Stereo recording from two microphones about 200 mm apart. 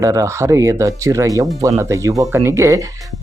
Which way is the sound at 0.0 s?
15° right (ahead or behind).